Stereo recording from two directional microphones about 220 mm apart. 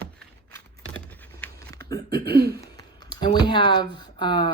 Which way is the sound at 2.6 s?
15° left (ahead or behind).